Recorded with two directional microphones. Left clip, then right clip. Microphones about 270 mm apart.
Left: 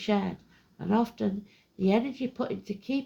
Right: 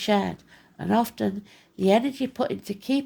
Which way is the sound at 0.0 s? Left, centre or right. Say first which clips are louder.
Right 6 dB; right.